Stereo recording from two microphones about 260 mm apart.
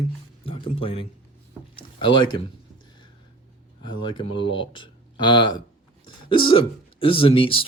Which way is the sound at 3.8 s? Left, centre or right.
Centre.